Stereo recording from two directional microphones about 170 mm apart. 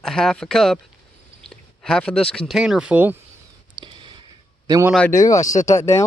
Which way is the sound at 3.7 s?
30° right (ahead or behind).